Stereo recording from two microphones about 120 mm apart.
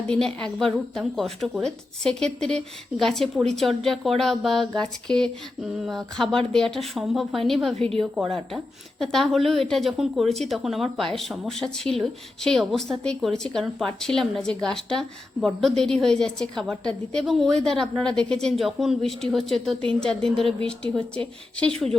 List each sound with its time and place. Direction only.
0.1 s speech: 5° left (ahead or behind)
7.8 s a woman's voice: 55° right (ahead or behind)
8.1 s speech: 5° right (ahead or behind)